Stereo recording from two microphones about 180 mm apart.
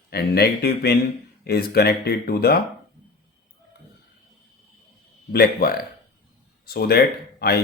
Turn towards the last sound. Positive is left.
turn(degrees=60)  # may be behind; listen again after turning